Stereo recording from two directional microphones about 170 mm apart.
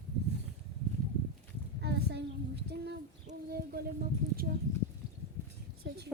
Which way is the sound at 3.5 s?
60° right (ahead or behind).